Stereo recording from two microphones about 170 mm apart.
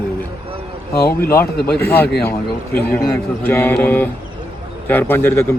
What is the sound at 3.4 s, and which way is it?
Speech, 10° left (ahead or behind).